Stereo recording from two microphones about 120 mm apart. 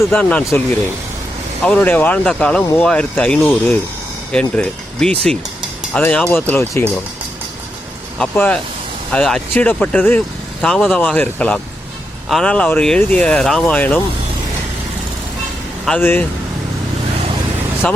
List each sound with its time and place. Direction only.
0.1 s speech: 10° left (ahead or behind)
1.6 s speech: 10° left (ahead or behind)
6.2 s speech: 20° left (ahead or behind)
8.2 s speech: 10° left (ahead or behind)
16.0 s speech: 15° left (ahead or behind)
17.8 s speech: 10° left (ahead or behind)